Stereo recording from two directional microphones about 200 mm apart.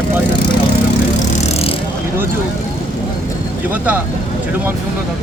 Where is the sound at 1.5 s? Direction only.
30° left (ahead or behind).